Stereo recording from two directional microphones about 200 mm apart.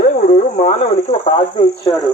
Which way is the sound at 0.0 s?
40° left (ahead or behind).